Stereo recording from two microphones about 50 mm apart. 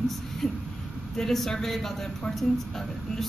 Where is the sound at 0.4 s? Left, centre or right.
Centre.